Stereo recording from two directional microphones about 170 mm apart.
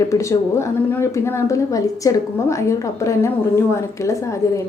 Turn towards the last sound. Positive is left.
turn(degrees=15)  # may be behind; listen again after turning